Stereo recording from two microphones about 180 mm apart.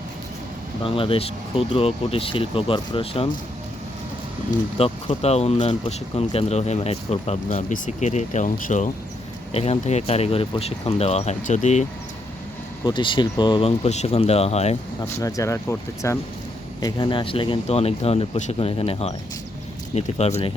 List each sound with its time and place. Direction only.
0.9 s speech: 30° left (ahead or behind)
4.5 s speech: 30° left (ahead or behind); by 8.9 s 45° left (ahead or behind)
9.5 s speech: 35° left (ahead or behind)
12.8 s speech: 25° left (ahead or behind)
15.0 s speech: 15° left (ahead or behind)
16.8 s speech: 25° left (ahead or behind)